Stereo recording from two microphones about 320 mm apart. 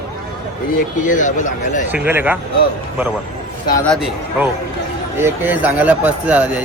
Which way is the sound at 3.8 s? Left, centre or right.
Centre.